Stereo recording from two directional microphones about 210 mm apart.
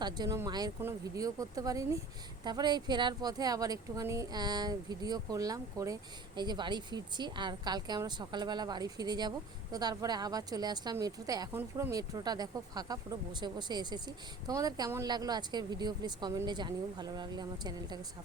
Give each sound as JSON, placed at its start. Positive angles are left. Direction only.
{"t": 0.0, "sound": "speech", "side_deg": -15}